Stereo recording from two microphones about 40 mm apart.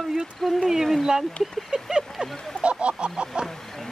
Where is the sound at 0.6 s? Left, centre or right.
Centre.